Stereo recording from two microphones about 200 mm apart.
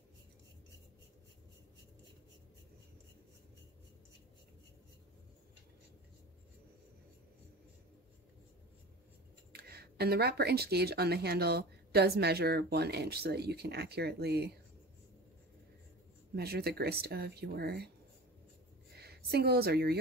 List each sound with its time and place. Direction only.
9.5 s speech: 50° right (ahead or behind)
16.3 s speech: 50° right (ahead or behind)
18.9 s a woman's voice: 50° right (ahead or behind)